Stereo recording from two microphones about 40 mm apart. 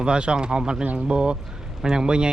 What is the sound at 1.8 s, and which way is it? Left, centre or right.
Speech, centre.